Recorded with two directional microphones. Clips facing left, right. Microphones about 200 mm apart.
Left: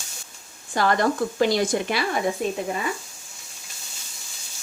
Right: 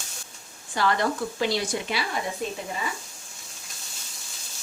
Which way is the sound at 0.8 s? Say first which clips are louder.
Left 4 dB; 45° left (ahead or behind).